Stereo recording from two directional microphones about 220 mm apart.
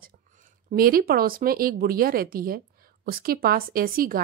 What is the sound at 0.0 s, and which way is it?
Speech, 40° right (ahead or behind).